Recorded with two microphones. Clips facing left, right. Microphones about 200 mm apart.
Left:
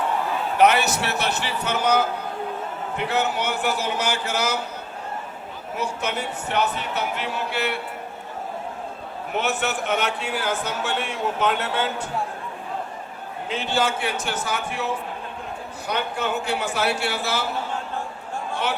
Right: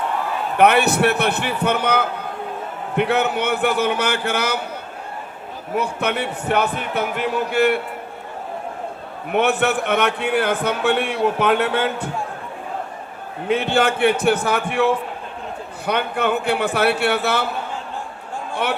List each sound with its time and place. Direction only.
0.5 s a man's voice: 55° right (ahead or behind)
5.7 s speech: 60° right (ahead or behind)
9.3 s a man's voice: 60° right (ahead or behind)
13.5 s a man's voice: 60° right (ahead or behind)
15.9 s a man's voice: 60° right (ahead or behind)